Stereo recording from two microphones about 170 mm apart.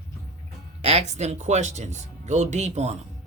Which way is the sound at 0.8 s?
35° right (ahead or behind).